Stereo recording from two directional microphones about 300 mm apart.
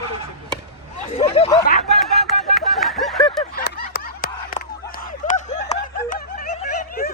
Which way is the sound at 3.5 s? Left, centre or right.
Left.